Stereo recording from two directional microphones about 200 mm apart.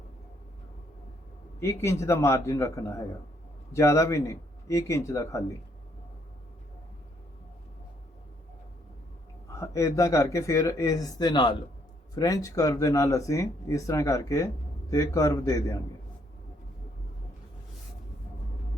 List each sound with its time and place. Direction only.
1.5 s speech: 15° left (ahead or behind)
9.5 s speech: 15° left (ahead or behind)